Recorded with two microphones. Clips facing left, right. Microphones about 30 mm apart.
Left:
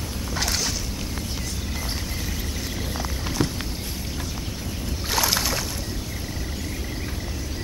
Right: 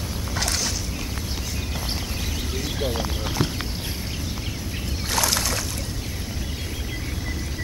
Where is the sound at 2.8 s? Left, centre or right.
Right.